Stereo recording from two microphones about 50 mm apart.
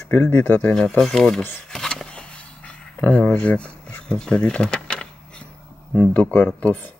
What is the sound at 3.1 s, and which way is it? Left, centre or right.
Speech, left.